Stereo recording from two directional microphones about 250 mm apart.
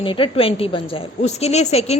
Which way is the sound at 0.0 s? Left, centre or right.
Left.